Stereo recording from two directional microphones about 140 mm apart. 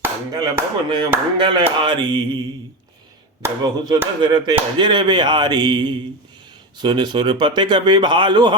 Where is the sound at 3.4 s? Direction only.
30° right (ahead or behind).